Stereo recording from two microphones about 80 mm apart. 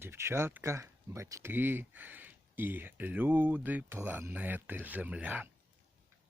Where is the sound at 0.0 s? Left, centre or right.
Right.